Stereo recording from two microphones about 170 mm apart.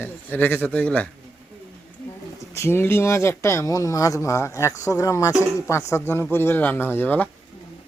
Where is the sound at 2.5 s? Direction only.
15° left (ahead or behind).